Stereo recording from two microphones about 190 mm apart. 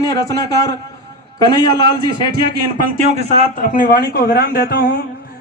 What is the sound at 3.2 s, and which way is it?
A man's voice, 40° left (ahead or behind).